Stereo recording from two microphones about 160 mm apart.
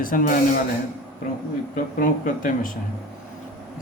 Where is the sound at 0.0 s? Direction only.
60° left (ahead or behind).